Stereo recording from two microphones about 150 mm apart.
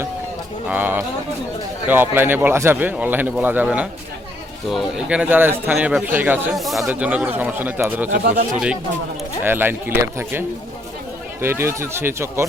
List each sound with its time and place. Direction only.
0.7 s speech: 10° right (ahead or behind)
6.6 s speech: centre (ahead or behind); by 12.5 s 15° right (ahead or behind)